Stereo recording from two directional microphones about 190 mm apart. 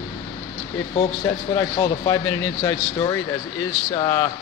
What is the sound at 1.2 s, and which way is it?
Speech, 20° left (ahead or behind).